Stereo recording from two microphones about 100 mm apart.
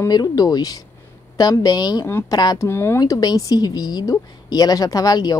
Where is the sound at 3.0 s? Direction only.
40° left (ahead or behind).